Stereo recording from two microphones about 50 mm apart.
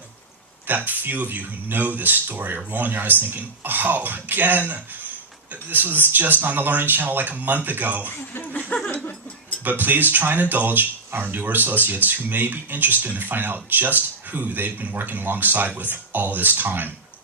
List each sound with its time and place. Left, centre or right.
0.7 s speech: right
8.3 s speech: left
9.6 s speech: right